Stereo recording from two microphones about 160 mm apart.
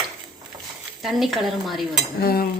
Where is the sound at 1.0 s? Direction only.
Centre (ahead or behind).